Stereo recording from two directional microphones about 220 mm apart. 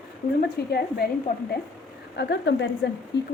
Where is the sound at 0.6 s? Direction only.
45° left (ahead or behind).